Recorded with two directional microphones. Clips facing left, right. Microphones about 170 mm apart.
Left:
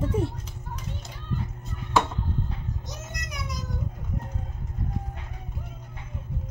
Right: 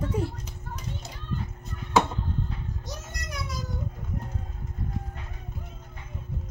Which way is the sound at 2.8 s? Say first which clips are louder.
Even; 20° left (ahead or behind).